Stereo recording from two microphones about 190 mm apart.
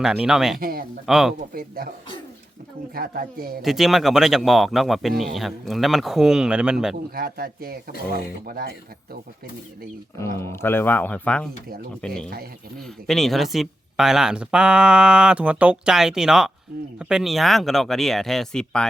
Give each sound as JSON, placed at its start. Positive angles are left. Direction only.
{"t": 0.0, "sound": "speech", "side_deg": -5}
{"t": 0.6, "sound": "speech", "side_deg": -50}
{"t": 1.0, "sound": "speech", "side_deg": 0}
{"t": 1.5, "sound": "speech", "side_deg": -50}
{"t": 2.9, "sound": "speech", "side_deg": -50}
{"t": 3.6, "sound": "speech", "side_deg": 0}
{"t": 7.1, "sound": "speech", "side_deg": -50}
{"t": 10.2, "sound": "speech", "side_deg": 15}